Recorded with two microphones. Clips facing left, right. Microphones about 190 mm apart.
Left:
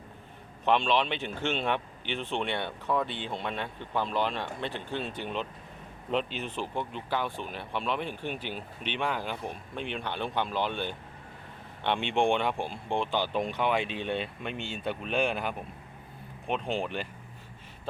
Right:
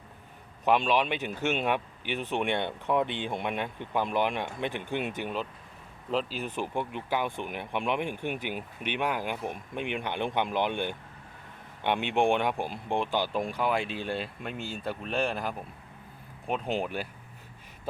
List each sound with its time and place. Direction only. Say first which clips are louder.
0.6 s speech: right 1 dB; 10° right (ahead or behind)
6.6 s speech: right 2 dB; 15° right (ahead or behind)